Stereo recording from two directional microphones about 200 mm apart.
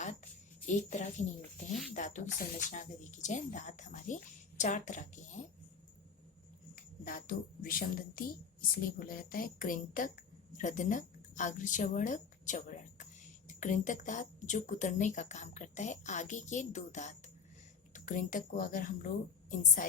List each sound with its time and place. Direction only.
0.7 s a woman's voice: 35° left (ahead or behind)
6.7 s a woman's voice: 45° left (ahead or behind)